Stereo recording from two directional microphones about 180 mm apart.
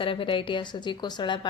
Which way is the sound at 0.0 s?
30° left (ahead or behind).